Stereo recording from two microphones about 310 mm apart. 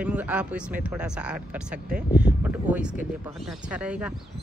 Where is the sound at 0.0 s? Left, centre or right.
Centre.